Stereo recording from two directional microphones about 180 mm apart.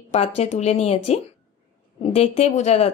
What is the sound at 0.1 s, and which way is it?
Speech, 35° left (ahead or behind).